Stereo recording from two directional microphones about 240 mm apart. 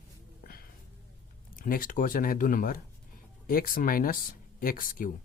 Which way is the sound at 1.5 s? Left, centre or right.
Left.